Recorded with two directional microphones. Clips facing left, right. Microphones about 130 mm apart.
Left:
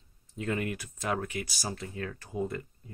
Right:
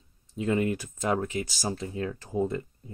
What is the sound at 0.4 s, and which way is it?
Speech, 20° right (ahead or behind).